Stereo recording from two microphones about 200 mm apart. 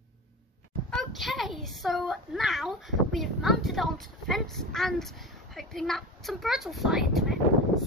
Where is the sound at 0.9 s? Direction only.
Centre (ahead or behind).